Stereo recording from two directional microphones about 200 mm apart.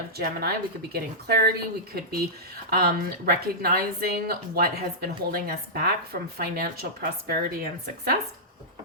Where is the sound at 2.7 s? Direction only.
50° right (ahead or behind).